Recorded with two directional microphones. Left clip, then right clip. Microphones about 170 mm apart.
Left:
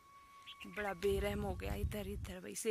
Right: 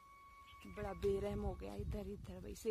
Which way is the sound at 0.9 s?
5° right (ahead or behind).